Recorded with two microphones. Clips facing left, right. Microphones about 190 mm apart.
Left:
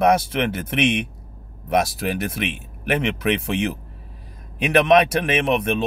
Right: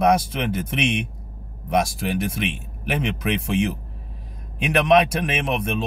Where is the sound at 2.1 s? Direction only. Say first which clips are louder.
Right 1 dB; 60° left (ahead or behind).